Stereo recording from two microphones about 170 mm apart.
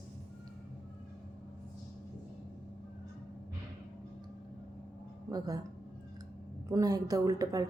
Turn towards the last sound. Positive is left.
turn(degrees=-20)  # may be behind; listen again after turning